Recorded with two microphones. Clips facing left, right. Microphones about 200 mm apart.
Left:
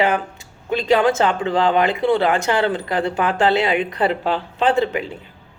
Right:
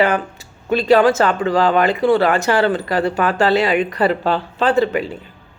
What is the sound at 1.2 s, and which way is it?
A woman's voice, 20° left (ahead or behind).